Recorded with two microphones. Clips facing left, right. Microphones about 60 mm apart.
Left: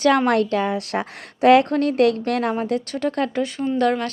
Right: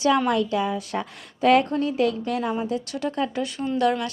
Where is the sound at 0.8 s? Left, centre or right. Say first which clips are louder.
Left 4 dB; left.